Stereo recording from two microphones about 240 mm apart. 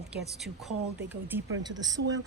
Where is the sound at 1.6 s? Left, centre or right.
Centre.